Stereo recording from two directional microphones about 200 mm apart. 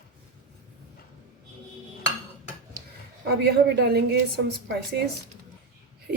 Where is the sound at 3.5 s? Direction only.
55° right (ahead or behind).